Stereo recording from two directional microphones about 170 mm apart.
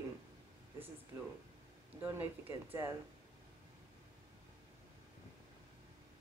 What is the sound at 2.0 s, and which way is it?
Speech, 10° right (ahead or behind).